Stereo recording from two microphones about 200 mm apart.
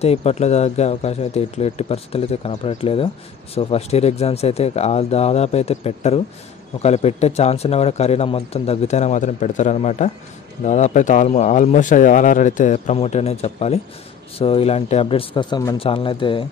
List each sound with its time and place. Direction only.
0.0 s speech: 30° left (ahead or behind)